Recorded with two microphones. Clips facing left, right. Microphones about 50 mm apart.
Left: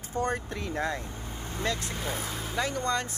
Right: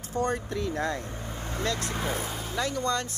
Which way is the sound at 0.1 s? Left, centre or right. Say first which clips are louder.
Right 2 dB; left.